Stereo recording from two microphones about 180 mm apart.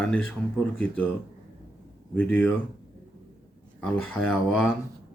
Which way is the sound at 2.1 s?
10° left (ahead or behind).